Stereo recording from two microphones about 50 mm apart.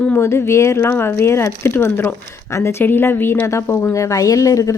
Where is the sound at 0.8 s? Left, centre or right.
Left.